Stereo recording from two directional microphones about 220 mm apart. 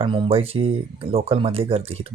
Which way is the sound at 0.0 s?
25° right (ahead or behind).